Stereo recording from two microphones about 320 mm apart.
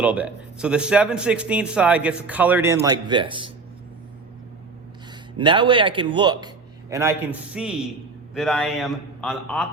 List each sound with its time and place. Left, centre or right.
0.0 s a man's voice: centre
5.4 s a man's voice: centre